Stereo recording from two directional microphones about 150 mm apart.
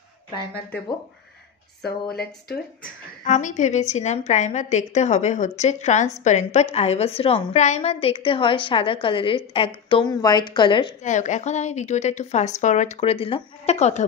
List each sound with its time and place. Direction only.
1.9 s speech: 90° left
3.3 s a woman's voice: 55° left (ahead or behind); by 10.9 s 30° left (ahead or behind)
11.1 s a woman's voice: 55° left (ahead or behind)